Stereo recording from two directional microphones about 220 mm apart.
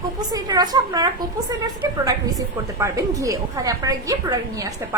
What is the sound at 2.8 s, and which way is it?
A woman's voice, 15° right (ahead or behind).